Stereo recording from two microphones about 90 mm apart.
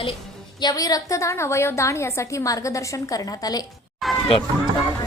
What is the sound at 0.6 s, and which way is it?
A woman's voice, 45° left (ahead or behind).